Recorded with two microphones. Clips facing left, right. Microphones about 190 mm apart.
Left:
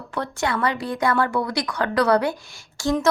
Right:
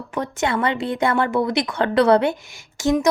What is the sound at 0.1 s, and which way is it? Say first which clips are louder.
A woman's voice: right 2 dB; 20° right (ahead or behind).